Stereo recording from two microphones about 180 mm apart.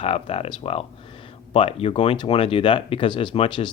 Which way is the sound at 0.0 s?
35° left (ahead or behind).